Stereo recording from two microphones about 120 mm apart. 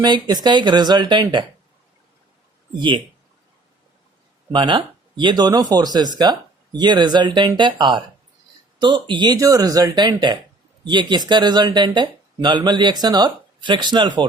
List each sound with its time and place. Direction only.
0.0 s speech: 35° right (ahead or behind)
2.7 s speech: 45° right (ahead or behind)
4.5 s speech: 40° right (ahead or behind)